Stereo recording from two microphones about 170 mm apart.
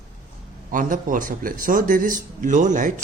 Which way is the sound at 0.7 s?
50° right (ahead or behind).